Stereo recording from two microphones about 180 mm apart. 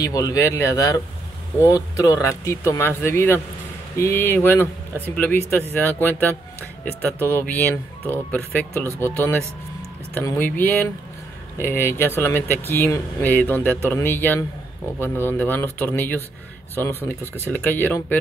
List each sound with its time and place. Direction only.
0.0 s speech: 20° left (ahead or behind)